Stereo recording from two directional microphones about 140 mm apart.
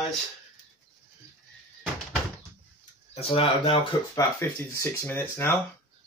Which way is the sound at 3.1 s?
40° left (ahead or behind).